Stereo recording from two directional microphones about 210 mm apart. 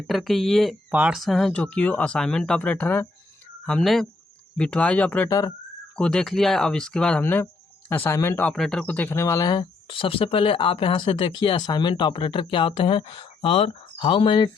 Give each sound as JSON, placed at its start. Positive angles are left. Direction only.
{"t": 0.1, "sound": "speech", "side_deg": 0}